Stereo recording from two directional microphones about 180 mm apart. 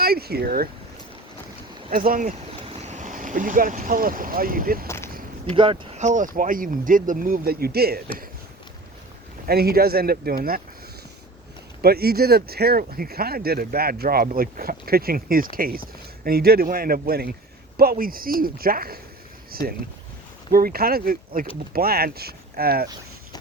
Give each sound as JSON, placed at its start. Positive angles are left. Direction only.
{"t": 0.0, "sound": "speech", "side_deg": -60}
{"t": 1.9, "sound": "speech", "side_deg": -50}
{"t": 5.5, "sound": "speech", "side_deg": -30}
{"t": 6.0, "sound": "speech", "side_deg": -45}
{"t": 9.5, "sound": "speech", "side_deg": -60}
{"t": 11.8, "sound": "speech", "side_deg": -60}